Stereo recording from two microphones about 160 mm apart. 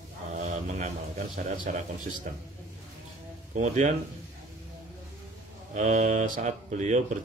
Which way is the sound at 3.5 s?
50° right (ahead or behind).